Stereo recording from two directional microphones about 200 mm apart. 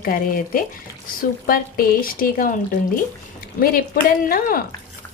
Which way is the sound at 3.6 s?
45° left (ahead or behind).